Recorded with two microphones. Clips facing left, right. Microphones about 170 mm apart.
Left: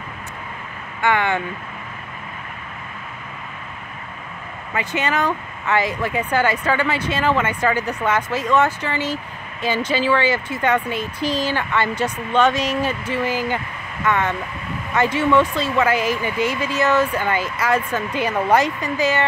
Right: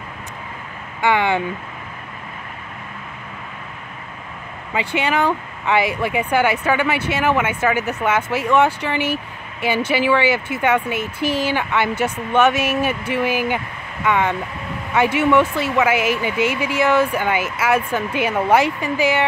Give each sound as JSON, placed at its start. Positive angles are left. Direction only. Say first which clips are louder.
{"t": 4.7, "sound": "speech", "louder": "right 2 dB", "side_deg": -10}
{"t": 10.9, "sound": "speech", "louder": "right 1 dB", "side_deg": -70}
{"t": 11.4, "sound": "speech", "louder": "right 1 dB", "side_deg": -10}